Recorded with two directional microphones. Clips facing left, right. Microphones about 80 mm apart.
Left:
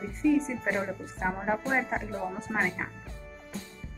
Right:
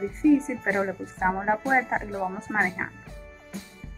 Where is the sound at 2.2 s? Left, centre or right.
Centre.